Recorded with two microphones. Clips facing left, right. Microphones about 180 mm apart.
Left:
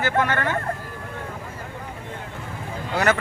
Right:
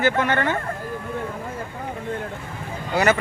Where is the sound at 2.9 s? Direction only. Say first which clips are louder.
Right 2 dB; 5° right (ahead or behind).